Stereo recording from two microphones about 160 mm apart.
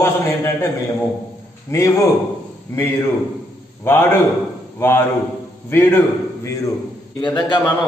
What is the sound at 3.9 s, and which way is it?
Speech, 15° left (ahead or behind).